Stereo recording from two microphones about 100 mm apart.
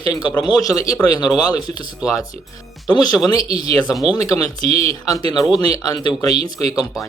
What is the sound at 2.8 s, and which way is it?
Speech, 40° left (ahead or behind).